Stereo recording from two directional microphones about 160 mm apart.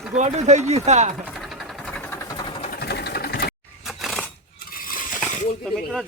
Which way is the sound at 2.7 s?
80° left.